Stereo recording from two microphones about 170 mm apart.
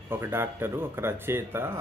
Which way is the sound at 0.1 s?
15° right (ahead or behind).